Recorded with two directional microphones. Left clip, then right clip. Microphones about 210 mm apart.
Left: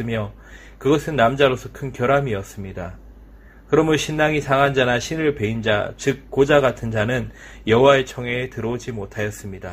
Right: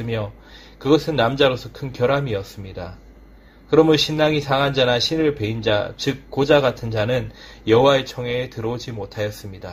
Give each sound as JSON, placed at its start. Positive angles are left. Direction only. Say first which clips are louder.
{"t": 0.8, "sound": "a man's voice", "louder": "even", "side_deg": 30}